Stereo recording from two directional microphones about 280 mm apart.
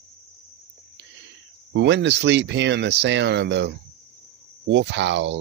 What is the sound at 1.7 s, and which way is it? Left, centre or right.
Speech, right.